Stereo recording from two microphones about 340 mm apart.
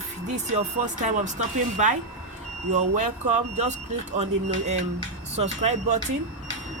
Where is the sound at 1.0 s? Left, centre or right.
Right.